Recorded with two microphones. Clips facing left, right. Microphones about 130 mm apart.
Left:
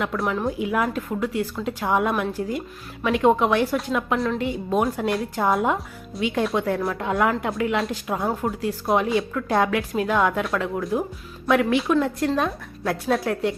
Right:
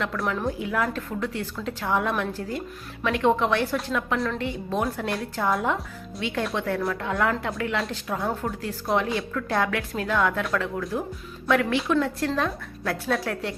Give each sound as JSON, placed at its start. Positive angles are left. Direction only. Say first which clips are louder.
{"t": 0.0, "sound": "a woman's voice", "louder": "left 3 dB", "side_deg": 20}